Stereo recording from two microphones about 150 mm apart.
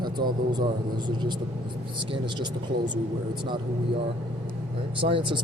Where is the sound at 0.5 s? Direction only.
30° right (ahead or behind).